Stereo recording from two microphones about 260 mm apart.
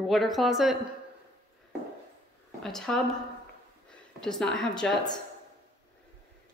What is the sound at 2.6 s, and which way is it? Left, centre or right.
Speech, centre.